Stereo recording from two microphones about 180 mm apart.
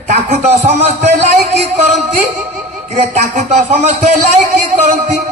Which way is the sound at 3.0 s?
45° right (ahead or behind).